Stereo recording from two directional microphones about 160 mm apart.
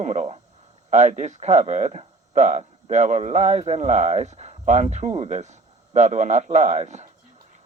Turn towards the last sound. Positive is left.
turn(degrees=-45)  # may be behind; listen again after turning